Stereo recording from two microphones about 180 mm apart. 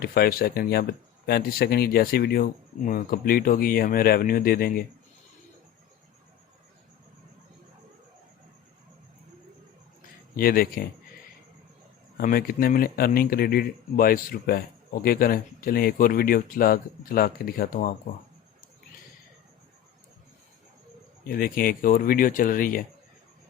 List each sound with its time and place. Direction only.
0.0 s speech: 55° left (ahead or behind)
10.3 s speech: 55° left (ahead or behind)
12.1 s speech: 55° left (ahead or behind)
21.2 s speech: 55° left (ahead or behind)